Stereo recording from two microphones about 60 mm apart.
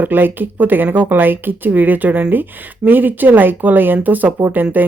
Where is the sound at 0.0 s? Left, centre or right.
Right.